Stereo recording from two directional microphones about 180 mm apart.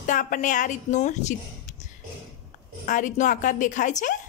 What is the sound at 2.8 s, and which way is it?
A woman's voice, 45° left (ahead or behind).